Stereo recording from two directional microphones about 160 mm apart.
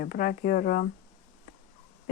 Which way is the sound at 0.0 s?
60° left (ahead or behind).